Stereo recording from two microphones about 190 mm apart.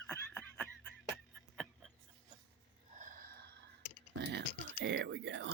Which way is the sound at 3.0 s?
45° right (ahead or behind).